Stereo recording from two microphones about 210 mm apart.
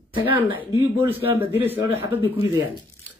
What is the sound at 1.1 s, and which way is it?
Speech, 10° right (ahead or behind).